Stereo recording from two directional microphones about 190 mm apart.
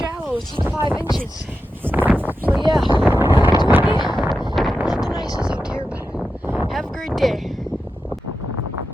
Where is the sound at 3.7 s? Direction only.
10° right (ahead or behind).